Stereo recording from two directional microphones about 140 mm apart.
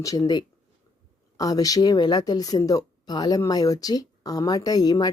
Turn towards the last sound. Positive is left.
turn(degrees=30)  # may be behind; listen again after turning